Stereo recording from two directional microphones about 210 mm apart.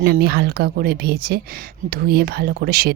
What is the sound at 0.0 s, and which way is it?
Speech, 45° right (ahead or behind).